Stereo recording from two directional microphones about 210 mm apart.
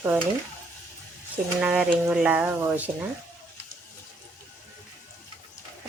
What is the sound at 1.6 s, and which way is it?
Speech, 5° right (ahead or behind).